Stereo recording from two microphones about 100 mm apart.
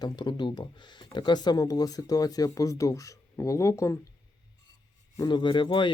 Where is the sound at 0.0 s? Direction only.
45° left (ahead or behind); by 3.9 s 30° left (ahead or behind).